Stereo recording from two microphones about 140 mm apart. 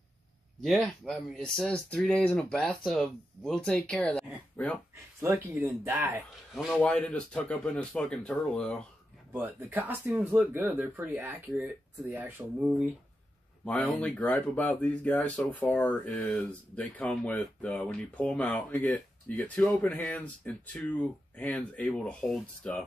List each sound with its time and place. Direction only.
0.6 s speech: centre (ahead or behind)
5.2 s speech: 15° right (ahead or behind)
6.5 s speech: centre (ahead or behind)
9.3 s speech: 15° right (ahead or behind)
13.7 s speech: 5° left (ahead or behind)